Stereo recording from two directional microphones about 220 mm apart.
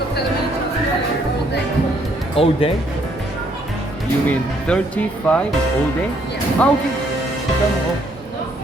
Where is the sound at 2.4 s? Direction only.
25° left (ahead or behind).